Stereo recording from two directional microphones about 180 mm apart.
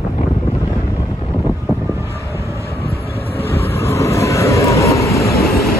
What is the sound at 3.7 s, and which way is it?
Vehicle, 15° left (ahead or behind).